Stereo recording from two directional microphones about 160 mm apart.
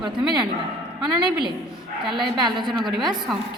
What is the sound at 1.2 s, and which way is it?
A woman's voice, 30° right (ahead or behind).